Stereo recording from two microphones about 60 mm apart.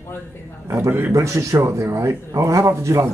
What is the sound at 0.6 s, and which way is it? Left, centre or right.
A man's voice, right.